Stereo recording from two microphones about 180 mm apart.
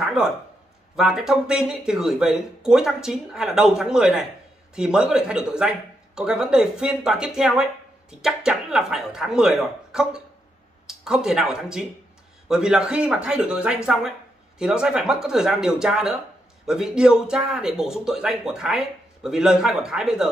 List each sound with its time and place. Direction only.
0.2 s a man's voice: 5° right (ahead or behind)